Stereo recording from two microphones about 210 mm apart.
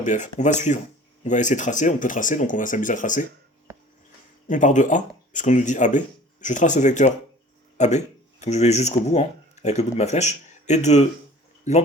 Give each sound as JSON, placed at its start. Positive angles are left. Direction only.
{"t": 0.0, "sound": "speech", "side_deg": 35}
{"t": 4.4, "sound": "speech", "side_deg": 35}